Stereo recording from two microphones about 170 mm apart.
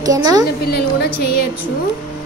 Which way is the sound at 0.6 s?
70° left (ahead or behind).